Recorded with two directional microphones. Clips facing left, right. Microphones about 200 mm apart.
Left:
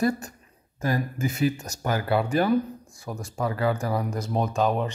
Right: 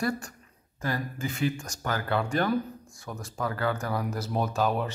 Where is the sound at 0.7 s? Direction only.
15° left (ahead or behind).